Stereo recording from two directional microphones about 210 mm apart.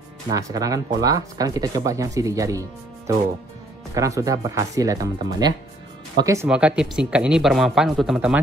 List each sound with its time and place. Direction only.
0.3 s speech: 15° right (ahead or behind)
3.9 s speech: 15° right (ahead or behind)